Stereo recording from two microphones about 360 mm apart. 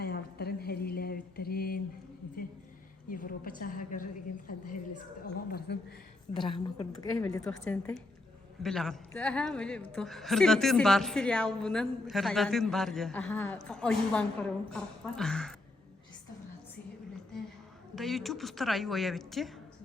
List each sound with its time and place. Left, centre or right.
0.0 s mantra: left
3.1 s a sound: left
6.3 s a woman's voice: centre
17.9 s a woman's voice: centre